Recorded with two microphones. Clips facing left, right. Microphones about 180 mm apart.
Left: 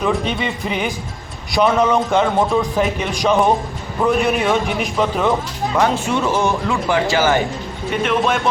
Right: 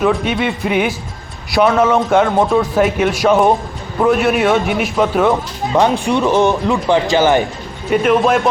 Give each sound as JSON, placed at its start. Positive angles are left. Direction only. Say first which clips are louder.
{"t": 0.0, "sound": "a man's voice", "louder": "right 4 dB", "side_deg": -5}
{"t": 5.7, "sound": "speech", "louder": "right 4 dB", "side_deg": -20}
{"t": 8.0, "sound": "a man's voice", "louder": "right 5 dB", "side_deg": -5}